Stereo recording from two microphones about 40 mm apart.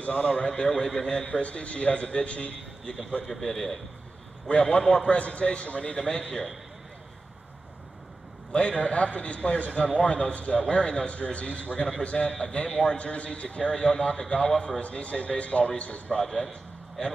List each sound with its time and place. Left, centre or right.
0.0 s a man's voice: left
3.3 s a man's voice: centre
4.5 s a man's voice: left
8.5 s a man's voice: left
16.2 s a man's voice: centre